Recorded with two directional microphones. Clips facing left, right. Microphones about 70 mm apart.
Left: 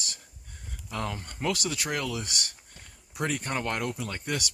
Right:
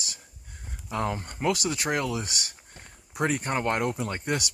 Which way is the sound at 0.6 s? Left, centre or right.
Right.